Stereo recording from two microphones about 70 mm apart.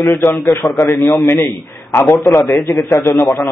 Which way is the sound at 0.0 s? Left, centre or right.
Left.